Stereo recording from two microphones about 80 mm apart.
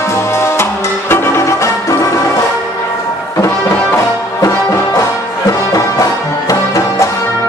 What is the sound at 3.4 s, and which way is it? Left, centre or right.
Music, left.